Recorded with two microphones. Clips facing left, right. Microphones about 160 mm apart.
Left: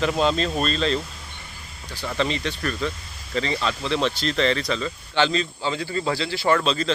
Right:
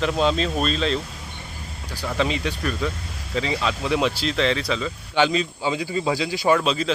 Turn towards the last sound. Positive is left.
turn(degrees=-10)  # may be behind; listen again after turning